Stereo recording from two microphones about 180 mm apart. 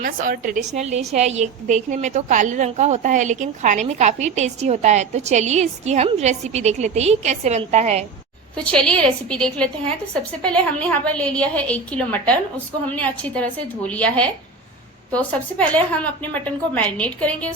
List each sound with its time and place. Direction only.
0.0 s a woman's voice: 50° right (ahead or behind)
8.5 s a woman's voice: 5° left (ahead or behind)